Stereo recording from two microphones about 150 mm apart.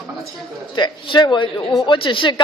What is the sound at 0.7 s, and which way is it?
A man's voice, 30° left (ahead or behind).